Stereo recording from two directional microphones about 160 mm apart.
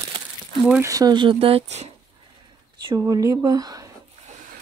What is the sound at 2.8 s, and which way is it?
Speech, 25° right (ahead or behind).